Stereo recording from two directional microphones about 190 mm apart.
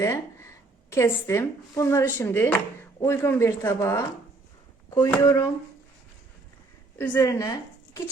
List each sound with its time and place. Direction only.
0.0 s speech: 15° left (ahead or behind)
7.0 s speech: 15° left (ahead or behind)